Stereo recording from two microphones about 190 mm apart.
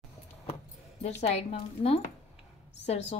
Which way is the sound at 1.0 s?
30° left (ahead or behind).